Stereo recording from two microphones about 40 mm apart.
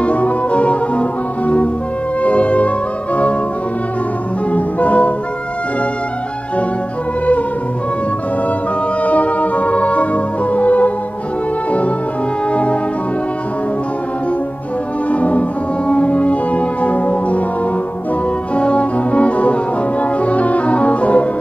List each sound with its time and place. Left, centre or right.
0.0 s music: left
2.2 s music: left
4.5 s music: left
9.0 s music: left
15.0 s music: left
18.6 s music: left